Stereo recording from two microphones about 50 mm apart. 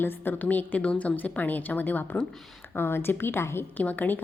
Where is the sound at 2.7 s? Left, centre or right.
Left.